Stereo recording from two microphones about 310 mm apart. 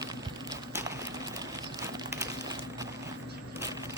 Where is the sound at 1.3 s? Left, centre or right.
Centre.